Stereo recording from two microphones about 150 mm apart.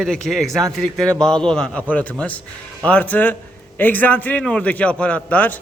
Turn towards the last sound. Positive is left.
turn(degrees=10)  # may be behind; listen again after turning